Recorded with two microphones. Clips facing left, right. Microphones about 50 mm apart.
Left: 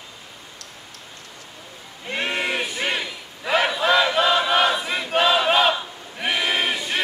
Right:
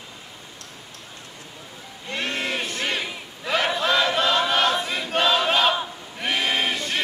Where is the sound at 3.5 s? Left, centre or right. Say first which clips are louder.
Left 3 dB; centre.